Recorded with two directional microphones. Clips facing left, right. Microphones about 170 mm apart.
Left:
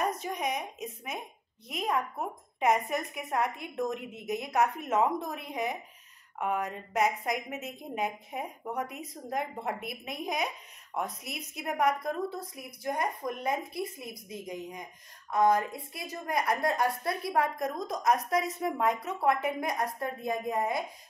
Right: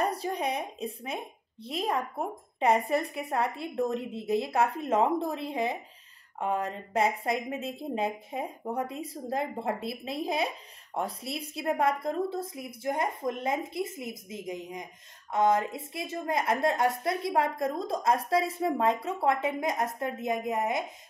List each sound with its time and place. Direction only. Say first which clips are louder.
0.0 s a woman's voice: right 2 dB; 30° right (ahead or behind)